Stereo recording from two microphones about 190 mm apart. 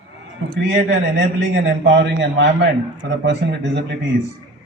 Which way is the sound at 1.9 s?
70° right (ahead or behind).